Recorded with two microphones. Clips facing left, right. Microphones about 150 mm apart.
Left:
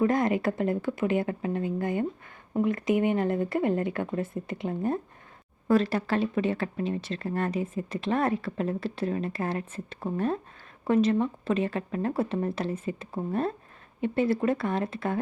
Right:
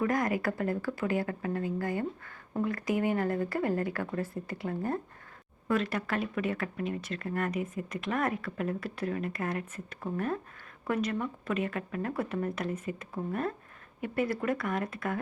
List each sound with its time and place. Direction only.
0.0 s speech: 25° left (ahead or behind)
5.6 s speech: 35° left (ahead or behind)